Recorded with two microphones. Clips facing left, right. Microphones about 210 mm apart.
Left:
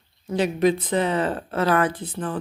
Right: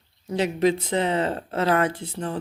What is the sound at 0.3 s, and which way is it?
Speech, 25° right (ahead or behind).